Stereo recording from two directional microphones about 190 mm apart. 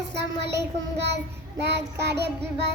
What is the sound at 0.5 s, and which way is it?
Child singing, 65° right (ahead or behind).